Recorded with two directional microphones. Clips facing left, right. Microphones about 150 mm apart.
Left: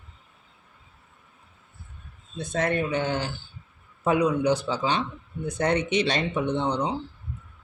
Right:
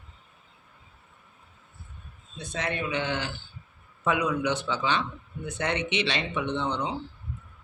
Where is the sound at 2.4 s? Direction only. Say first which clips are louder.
Left 6 dB; 50° left (ahead or behind).